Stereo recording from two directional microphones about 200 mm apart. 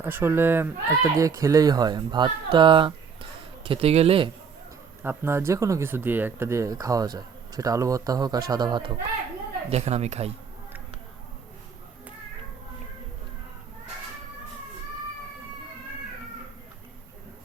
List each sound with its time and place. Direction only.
0.0 s speech: 10° right (ahead or behind); by 4.3 s 30° right (ahead or behind)
5.0 s speech: 10° right (ahead or behind); by 10.3 s 35° right (ahead or behind)